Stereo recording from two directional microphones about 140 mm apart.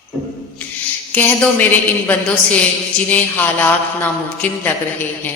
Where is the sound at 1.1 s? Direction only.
10° left (ahead or behind).